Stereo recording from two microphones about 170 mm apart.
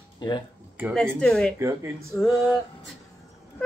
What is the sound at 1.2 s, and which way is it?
Male singing, 5° left (ahead or behind).